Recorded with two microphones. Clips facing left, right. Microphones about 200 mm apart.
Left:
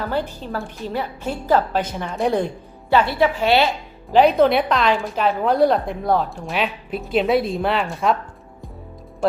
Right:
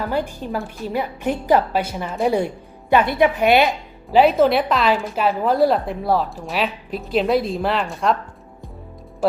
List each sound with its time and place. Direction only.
0.0 s a woman's voice: 10° right (ahead or behind)
2.9 s a woman's voice: 20° right (ahead or behind)
4.1 s a woman's voice: 5° right (ahead or behind)